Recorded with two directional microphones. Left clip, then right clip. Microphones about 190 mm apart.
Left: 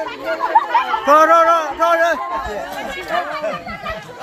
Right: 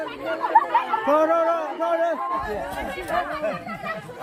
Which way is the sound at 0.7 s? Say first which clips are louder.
Left 7 dB; 20° left (ahead or behind).